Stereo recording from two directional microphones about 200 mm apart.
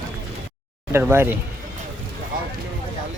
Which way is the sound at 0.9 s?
10° right (ahead or behind).